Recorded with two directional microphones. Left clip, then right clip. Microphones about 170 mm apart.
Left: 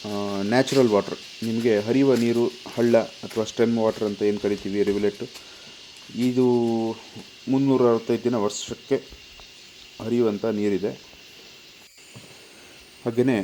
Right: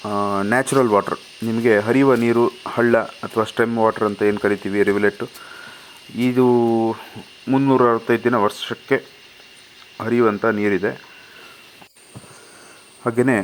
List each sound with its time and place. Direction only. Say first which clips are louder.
0.0 s speech: right 8 dB; 15° right (ahead or behind)
0.3 s speech: right 1 dB; centre (ahead or behind)
6.1 s speech: right 4 dB; centre (ahead or behind)
6.4 s speech: right 6 dB; 25° right (ahead or behind)
7.5 s speech: right 5 dB; centre (ahead or behind)
7.8 s speech: right 4 dB; 10° right (ahead or behind)
10.0 s speech: right 6 dB; centre (ahead or behind)
13.1 s speech: right 5 dB; centre (ahead or behind)